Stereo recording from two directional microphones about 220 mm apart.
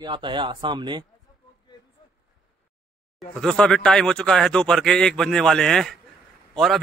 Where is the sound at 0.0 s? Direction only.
20° right (ahead or behind).